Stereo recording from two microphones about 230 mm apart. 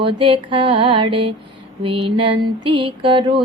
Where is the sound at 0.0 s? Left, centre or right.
Right.